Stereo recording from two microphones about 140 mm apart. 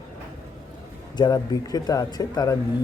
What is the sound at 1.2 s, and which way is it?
A man's voice, 25° left (ahead or behind).